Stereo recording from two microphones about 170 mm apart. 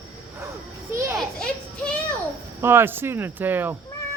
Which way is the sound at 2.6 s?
15° right (ahead or behind).